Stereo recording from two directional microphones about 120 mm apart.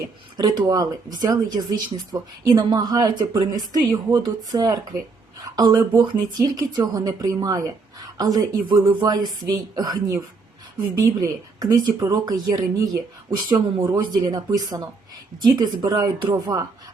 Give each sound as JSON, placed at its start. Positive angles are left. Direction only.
{"t": 0.3, "sound": "speech", "side_deg": -35}
{"t": 11.2, "sound": "speech", "side_deg": -30}